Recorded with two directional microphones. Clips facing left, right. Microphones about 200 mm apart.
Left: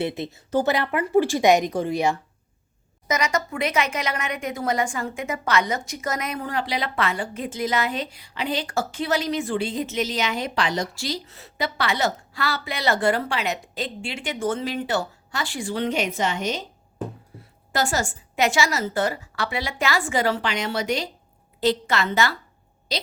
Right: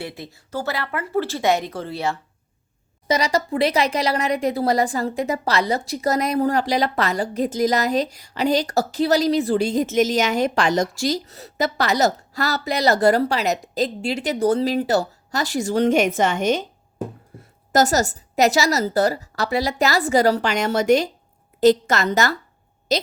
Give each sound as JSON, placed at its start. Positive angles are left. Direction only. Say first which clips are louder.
{"t": 0.0, "sound": "speech", "louder": "left 6 dB", "side_deg": 20}
{"t": 3.1, "sound": "speech", "louder": "right 4 dB", "side_deg": -35}
{"t": 17.3, "sound": "a sound", "louder": "right 2 dB", "side_deg": -50}
{"t": 17.7, "sound": "a woman's voice", "louder": "right 6 dB", "side_deg": -40}